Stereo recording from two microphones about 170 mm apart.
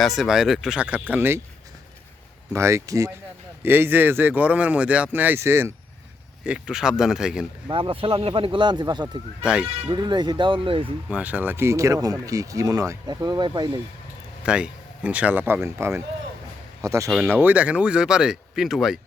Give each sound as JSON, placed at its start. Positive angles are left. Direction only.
{"t": 0.0, "sound": "speech", "side_deg": 0}
{"t": 2.5, "sound": "speech", "side_deg": -15}
{"t": 7.7, "sound": "speech", "side_deg": -30}
{"t": 9.4, "sound": "speech", "side_deg": -5}
{"t": 9.9, "sound": "speech", "side_deg": -25}
{"t": 11.1, "sound": "speech", "side_deg": -10}
{"t": 14.4, "sound": "speech", "side_deg": -5}